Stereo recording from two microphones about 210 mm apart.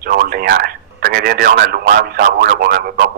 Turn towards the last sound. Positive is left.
turn(degrees=-45)  # may be behind; listen again after turning